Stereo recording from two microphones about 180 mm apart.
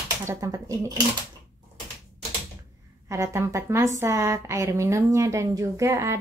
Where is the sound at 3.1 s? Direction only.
15° right (ahead or behind).